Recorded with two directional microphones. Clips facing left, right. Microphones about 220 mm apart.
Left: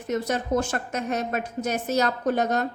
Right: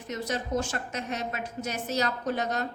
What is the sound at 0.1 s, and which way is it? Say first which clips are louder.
A woman's voice: left 6 dB; 50° left (ahead or behind).